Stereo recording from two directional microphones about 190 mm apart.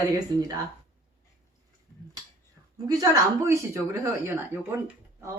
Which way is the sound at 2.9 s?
20° right (ahead or behind).